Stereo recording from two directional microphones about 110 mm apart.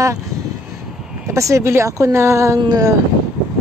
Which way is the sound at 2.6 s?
35° right (ahead or behind).